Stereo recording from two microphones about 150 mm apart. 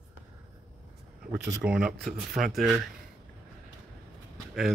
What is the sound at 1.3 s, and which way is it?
A man's voice, 5° right (ahead or behind).